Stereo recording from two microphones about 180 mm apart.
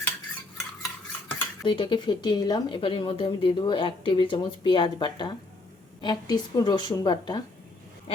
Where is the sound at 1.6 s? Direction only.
30° left (ahead or behind).